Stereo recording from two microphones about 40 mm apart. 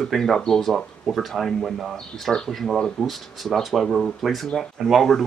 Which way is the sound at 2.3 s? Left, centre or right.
Centre.